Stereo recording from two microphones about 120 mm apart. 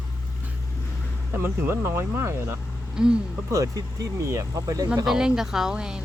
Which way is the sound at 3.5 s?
30° right (ahead or behind).